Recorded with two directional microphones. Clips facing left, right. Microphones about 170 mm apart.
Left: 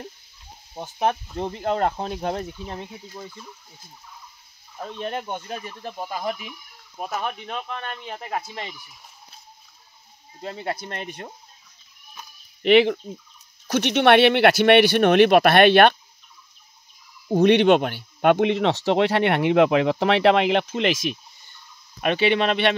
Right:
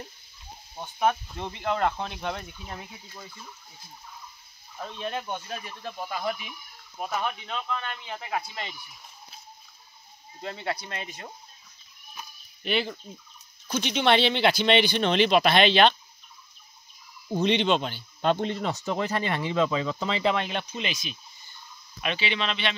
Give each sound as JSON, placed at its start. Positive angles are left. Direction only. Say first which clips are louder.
{"t": 0.7, "sound": "speech", "louder": "left 2 dB", "side_deg": 35}
{"t": 4.8, "sound": "speech", "louder": "left 3 dB", "side_deg": 45}
{"t": 10.4, "sound": "speech", "louder": "left 3 dB", "side_deg": 35}
{"t": 12.6, "sound": "speech", "louder": "left 13 dB", "side_deg": 80}
{"t": 13.7, "sound": "speech", "louder": "left 6 dB", "side_deg": 70}
{"t": 17.4, "sound": "speech", "louder": "left 8 dB", "side_deg": 65}
{"t": 22.0, "sound": "speech", "louder": "left 9 dB", "side_deg": 55}